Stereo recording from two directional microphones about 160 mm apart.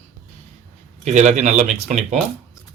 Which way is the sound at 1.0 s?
45° right (ahead or behind).